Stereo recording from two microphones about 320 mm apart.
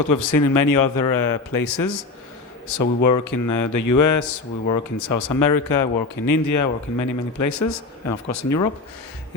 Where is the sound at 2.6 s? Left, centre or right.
Left.